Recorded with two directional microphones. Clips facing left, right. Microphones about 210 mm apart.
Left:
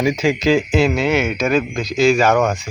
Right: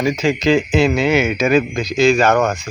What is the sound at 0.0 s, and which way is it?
Speech, 10° left (ahead or behind).